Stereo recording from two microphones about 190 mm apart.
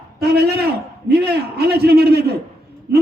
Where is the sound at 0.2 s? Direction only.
55° right (ahead or behind).